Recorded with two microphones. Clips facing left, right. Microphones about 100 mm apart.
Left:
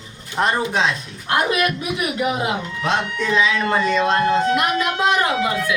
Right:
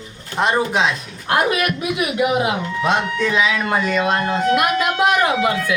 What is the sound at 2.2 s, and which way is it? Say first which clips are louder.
Speech: right 5 dB; 15° right (ahead or behind).